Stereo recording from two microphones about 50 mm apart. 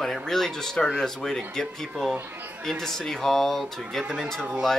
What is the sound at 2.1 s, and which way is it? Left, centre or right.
Speech, right.